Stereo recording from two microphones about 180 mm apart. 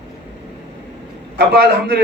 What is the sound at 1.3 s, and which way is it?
Speech, 70° right (ahead or behind).